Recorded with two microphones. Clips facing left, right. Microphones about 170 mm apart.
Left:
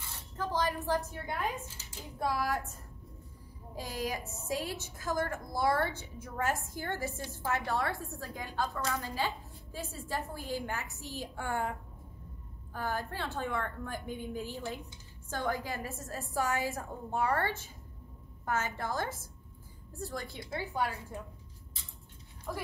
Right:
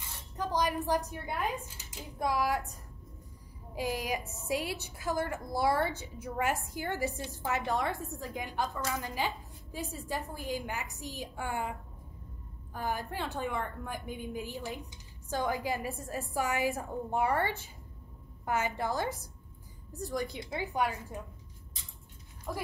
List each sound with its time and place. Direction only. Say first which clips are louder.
0.4 s a sound: right 2 dB; 15° right (ahead or behind)
1.8 s a woman's voice: right 1 dB; 15° right (ahead or behind)
3.7 s a woman's voice: right 3 dB; 15° right (ahead or behind)
12.7 s a woman's voice: right 1 dB; 15° right (ahead or behind)